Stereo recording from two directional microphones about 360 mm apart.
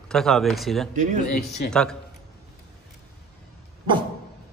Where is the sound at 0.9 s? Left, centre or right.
Right.